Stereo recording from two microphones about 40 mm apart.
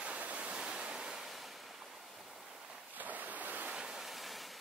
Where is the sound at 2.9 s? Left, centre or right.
Right.